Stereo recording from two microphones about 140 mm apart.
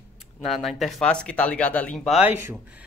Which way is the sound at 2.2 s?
15° right (ahead or behind).